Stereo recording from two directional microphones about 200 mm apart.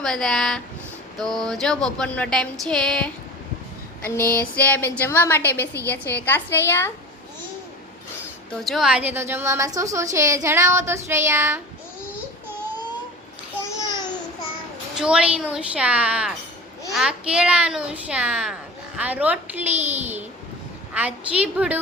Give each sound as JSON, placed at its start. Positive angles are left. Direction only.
{"t": 0.0, "sound": "a sound", "side_deg": 0}
{"t": 4.4, "sound": "a woman's voice", "side_deg": 10}
{"t": 8.5, "sound": "a woman's voice", "side_deg": 0}
{"t": 14.9, "sound": "a sound", "side_deg": -5}
{"t": 18.9, "sound": "a woman's voice", "side_deg": -5}
{"t": 19.7, "sound": "a child's voice", "side_deg": -35}
{"t": 20.9, "sound": "a woman's voice", "side_deg": -5}